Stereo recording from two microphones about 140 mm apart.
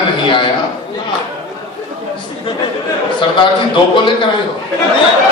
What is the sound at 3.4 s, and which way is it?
Speech, 35° left (ahead or behind).